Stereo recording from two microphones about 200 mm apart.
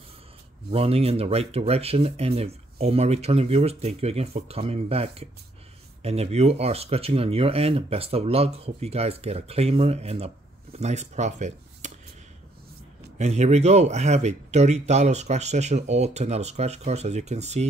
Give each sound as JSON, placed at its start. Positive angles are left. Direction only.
{"t": 0.7, "sound": "speech", "side_deg": -30}
{"t": 13.2, "sound": "speech", "side_deg": -35}